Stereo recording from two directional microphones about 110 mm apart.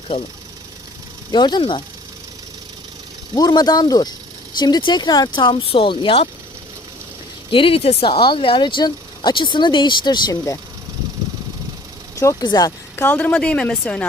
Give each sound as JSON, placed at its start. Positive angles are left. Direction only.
{"t": 1.3, "sound": "a woman's voice", "side_deg": 45}
{"t": 3.3, "sound": "a woman's voice", "side_deg": 35}
{"t": 7.5, "sound": "a woman's voice", "side_deg": 55}
{"t": 12.1, "sound": "speech", "side_deg": 30}
{"t": 13.0, "sound": "a woman's voice", "side_deg": 15}